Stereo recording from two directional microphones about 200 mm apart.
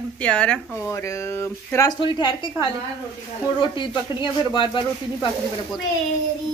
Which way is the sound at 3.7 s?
25° left (ahead or behind).